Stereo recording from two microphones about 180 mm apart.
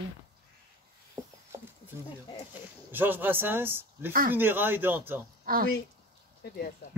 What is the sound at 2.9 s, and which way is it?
Speech, 10° right (ahead or behind).